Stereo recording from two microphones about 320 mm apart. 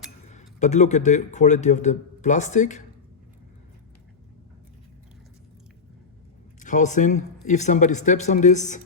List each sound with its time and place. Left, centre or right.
0.3 s speech: left
6.6 s speech: left